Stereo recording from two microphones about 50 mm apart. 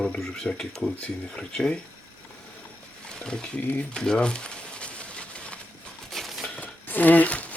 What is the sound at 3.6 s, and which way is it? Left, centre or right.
Speech, left.